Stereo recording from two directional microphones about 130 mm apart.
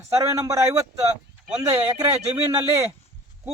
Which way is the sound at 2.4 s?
25° right (ahead or behind).